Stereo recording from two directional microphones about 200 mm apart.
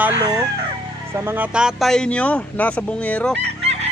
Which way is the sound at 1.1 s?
10° right (ahead or behind).